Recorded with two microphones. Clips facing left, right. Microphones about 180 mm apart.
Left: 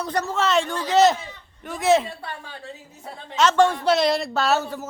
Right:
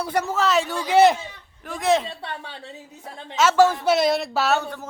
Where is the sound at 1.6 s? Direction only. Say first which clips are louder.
Left 2 dB; centre (ahead or behind).